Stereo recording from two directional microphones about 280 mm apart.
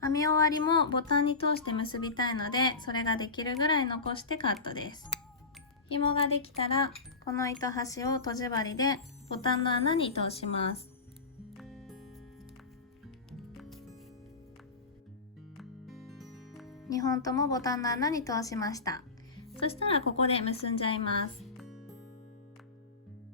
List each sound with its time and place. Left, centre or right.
0.0 s a woman's voice: centre
11.5 s music: centre
13.6 s music: centre
15.5 s music: centre
16.9 s a woman's voice: centre
21.4 s music: centre